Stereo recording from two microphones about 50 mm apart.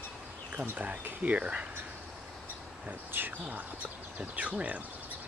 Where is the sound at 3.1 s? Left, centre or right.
Right.